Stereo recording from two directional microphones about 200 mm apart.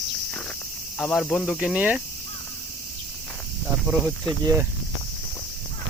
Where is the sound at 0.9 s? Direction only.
Centre (ahead or behind).